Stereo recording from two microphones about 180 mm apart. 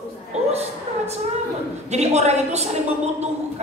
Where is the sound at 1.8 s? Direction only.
40° right (ahead or behind).